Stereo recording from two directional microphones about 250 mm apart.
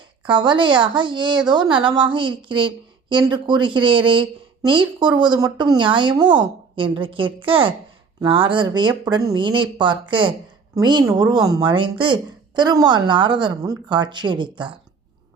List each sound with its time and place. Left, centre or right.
0.3 s a woman's voice: centre